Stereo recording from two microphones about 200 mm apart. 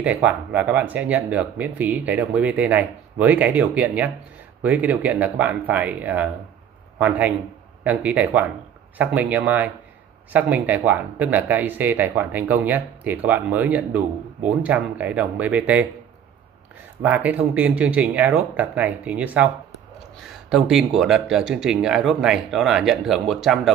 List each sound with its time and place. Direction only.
0.0 s speech: 5° right (ahead or behind)
17.0 s speech: 10° right (ahead or behind)